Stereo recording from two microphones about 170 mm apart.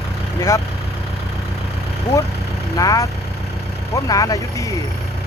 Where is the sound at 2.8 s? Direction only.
20° left (ahead or behind).